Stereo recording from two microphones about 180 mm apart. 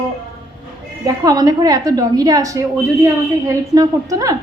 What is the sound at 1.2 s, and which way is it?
A woman's voice, 20° right (ahead or behind).